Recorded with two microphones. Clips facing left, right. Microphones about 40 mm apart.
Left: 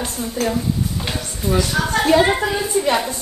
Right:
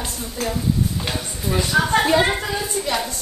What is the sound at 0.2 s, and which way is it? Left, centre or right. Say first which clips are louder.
Speech: left 6 dB; centre.